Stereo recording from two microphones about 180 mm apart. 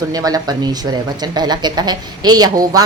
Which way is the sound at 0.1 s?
20° right (ahead or behind).